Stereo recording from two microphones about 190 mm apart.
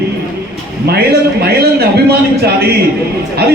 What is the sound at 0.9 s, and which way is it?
A man's voice, 55° right (ahead or behind).